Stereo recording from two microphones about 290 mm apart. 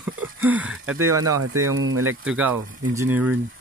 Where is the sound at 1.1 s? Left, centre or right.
Right.